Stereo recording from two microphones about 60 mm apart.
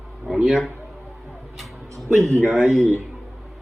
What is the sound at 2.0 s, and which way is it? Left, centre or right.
Speech, centre.